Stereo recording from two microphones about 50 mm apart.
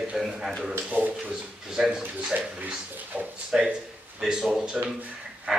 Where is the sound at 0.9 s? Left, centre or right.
Right.